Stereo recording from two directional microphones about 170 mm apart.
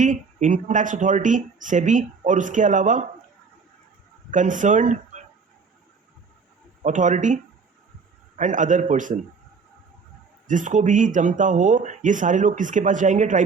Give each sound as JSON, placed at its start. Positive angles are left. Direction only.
{"t": 0.0, "sound": "speech", "side_deg": -45}
{"t": 4.3, "sound": "speech", "side_deg": -50}
{"t": 6.8, "sound": "speech", "side_deg": -45}
{"t": 8.4, "sound": "speech", "side_deg": -50}
{"t": 10.5, "sound": "speech", "side_deg": -50}